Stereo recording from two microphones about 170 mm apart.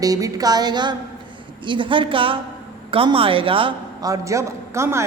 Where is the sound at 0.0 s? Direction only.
20° right (ahead or behind).